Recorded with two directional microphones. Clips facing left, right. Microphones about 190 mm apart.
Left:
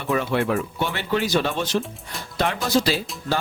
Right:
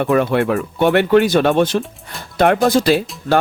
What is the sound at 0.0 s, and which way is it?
Speech, 55° right (ahead or behind).